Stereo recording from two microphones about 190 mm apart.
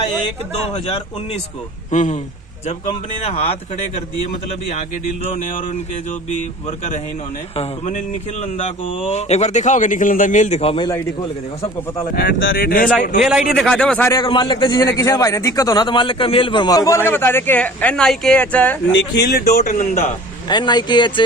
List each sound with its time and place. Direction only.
0.9 s speech: 30° left (ahead or behind)
7.5 s speech: 35° left (ahead or behind)
10.8 s a man's voice: 20° left (ahead or behind)
12.1 s speech: 60° left (ahead or behind)
13.2 s speech: centre (ahead or behind)
14.1 s a man's voice: 25° left (ahead or behind); by 18.8 s 10° left (ahead or behind)
18.9 s speech: 55° left (ahead or behind)
19.5 s speech: 40° left (ahead or behind)
20.5 s a man's voice: 25° left (ahead or behind)